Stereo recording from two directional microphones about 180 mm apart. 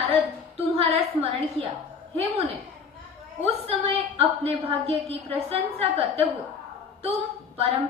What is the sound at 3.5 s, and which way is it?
A woman's voice, 30° right (ahead or behind).